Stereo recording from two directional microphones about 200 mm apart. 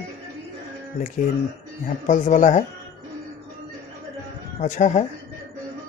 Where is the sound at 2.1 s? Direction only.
40° left (ahead or behind).